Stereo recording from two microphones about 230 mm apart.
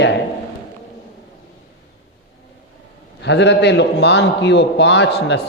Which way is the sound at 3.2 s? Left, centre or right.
Left.